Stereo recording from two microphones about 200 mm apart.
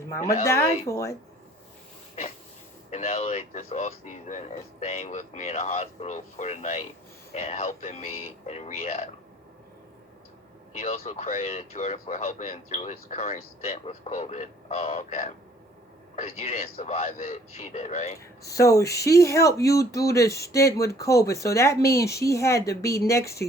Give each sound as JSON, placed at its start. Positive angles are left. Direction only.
{"t": 0.4, "sound": "speech", "side_deg": 15}
{"t": 2.9, "sound": "speech", "side_deg": 30}
{"t": 10.8, "sound": "speech", "side_deg": 30}
{"t": 18.2, "sound": "speech", "side_deg": 15}